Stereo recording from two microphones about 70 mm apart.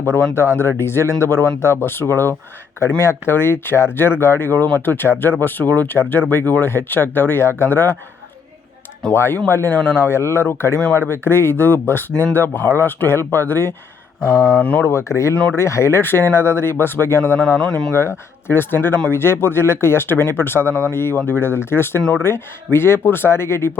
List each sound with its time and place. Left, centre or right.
0.3 s speech: left
9.1 s speech: left
14.2 s speech: centre
14.6 s speech: left
14.8 s speech: left
17.6 s speech: centre
17.9 s speech: left